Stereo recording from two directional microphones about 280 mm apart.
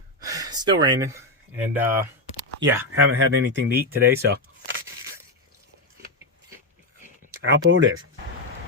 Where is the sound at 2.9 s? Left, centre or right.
Right.